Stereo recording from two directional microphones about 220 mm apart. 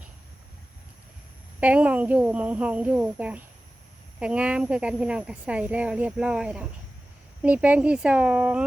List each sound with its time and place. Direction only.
1.6 s speech: 5° right (ahead or behind)